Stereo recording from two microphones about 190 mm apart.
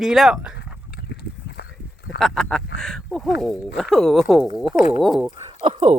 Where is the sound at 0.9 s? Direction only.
60° left (ahead or behind).